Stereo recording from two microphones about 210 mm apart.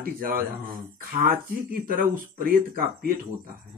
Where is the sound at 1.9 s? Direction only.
45° right (ahead or behind).